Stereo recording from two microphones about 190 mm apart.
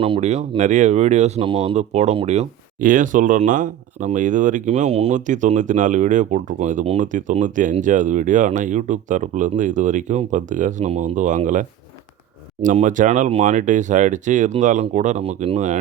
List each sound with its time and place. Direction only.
0.0 s speech: 30° right (ahead or behind)
12.6 s speech: 40° right (ahead or behind)